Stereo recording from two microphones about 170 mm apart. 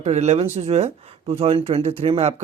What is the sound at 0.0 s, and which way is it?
Speech, 40° right (ahead or behind).